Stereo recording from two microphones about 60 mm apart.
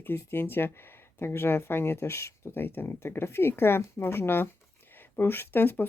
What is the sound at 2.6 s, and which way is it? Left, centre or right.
Speech, left.